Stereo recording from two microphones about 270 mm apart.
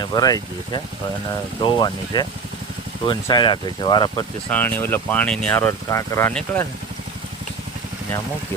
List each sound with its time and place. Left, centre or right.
0.0 s speech: centre